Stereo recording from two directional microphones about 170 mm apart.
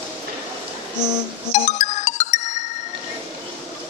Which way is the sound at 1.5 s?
45° left (ahead or behind).